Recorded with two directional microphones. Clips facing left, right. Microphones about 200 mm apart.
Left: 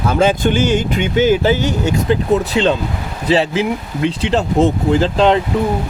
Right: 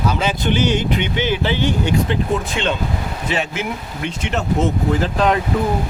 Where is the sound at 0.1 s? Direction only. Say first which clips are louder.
Left 6 dB; 50° left (ahead or behind); by 5.4 s 30° left (ahead or behind).